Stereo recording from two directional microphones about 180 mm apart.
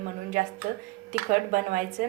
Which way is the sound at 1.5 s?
50° right (ahead or behind).